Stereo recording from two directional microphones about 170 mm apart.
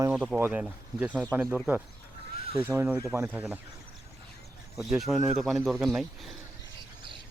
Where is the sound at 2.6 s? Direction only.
15° right (ahead or behind).